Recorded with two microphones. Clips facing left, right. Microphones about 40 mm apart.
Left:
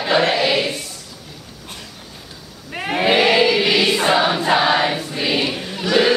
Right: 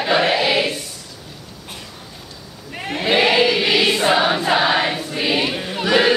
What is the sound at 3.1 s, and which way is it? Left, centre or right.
Choir, centre.